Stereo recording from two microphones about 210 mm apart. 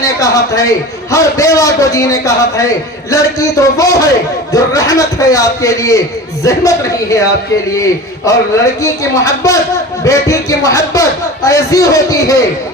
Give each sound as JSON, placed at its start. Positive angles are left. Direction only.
{"t": 0.0, "sound": "a man's voice", "side_deg": 15}